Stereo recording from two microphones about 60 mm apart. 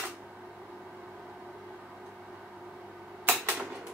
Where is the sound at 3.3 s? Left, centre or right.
Right.